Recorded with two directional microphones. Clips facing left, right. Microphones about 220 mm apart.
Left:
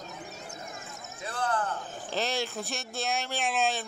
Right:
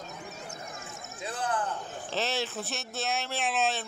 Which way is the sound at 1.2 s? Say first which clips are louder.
Left 1 dB; 15° right (ahead or behind).